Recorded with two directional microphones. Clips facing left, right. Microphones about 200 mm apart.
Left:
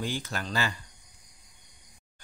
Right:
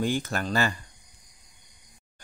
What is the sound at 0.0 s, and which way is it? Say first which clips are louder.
Speech: right 6 dB; 50° right (ahead or behind).